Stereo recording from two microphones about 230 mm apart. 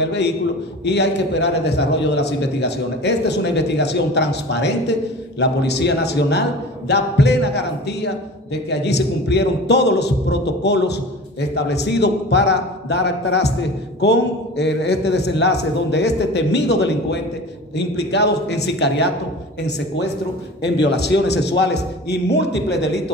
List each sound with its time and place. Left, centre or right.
0.0 s a man's voice: left
20.6 s a man's voice: left